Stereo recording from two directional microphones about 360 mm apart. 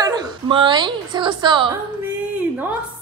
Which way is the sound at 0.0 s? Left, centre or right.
Centre.